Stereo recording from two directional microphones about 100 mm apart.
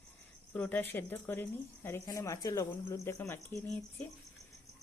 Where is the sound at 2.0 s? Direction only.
35° left (ahead or behind).